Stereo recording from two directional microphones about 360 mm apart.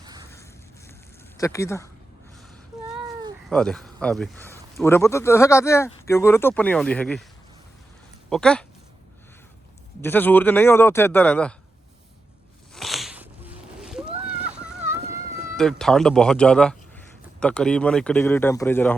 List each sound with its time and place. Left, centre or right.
1.4 s speech: centre
3.5 s speech: centre
8.3 s speech: centre
10.0 s speech: centre
12.7 s a sound: centre
14.9 s a sound: centre
15.5 s speech: centre